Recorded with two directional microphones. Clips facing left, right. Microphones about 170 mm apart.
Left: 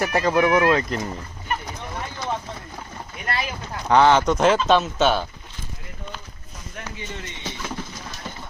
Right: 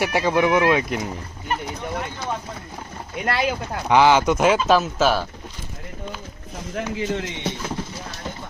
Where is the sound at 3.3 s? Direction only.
65° right (ahead or behind).